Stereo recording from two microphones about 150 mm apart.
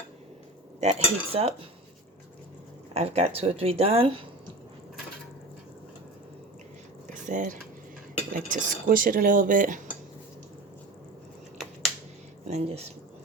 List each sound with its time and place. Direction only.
0.8 s cutlery: 45° right (ahead or behind)
2.9 s speech: 45° right (ahead or behind)
7.1 s drip: 60° right (ahead or behind)
8.3 s cutlery: 65° right (ahead or behind)
12.5 s cutlery: 45° right (ahead or behind)